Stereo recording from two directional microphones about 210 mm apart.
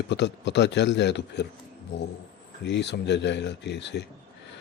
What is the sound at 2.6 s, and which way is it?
A man's voice, 55° left (ahead or behind).